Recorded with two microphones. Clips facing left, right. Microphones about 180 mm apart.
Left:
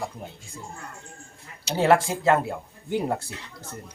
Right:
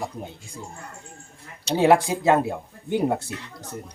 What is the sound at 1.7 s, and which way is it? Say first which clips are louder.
Speech: right 2 dB; 15° right (ahead or behind).